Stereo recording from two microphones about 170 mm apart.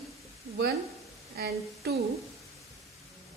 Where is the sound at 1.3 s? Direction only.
70° right (ahead or behind).